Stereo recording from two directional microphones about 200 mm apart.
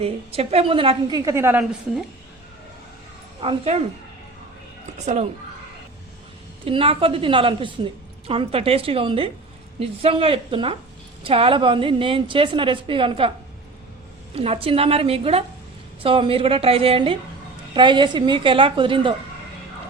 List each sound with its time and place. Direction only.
0.0 s a woman's voice: 30° right (ahead or behind); by 1.6 s 10° right (ahead or behind)
3.4 s a woman's voice: 30° right (ahead or behind)
4.9 s a child's voice: 35° right (ahead or behind)
6.7 s a woman's voice: 25° right (ahead or behind)
14.3 s a woman's voice: 30° right (ahead or behind)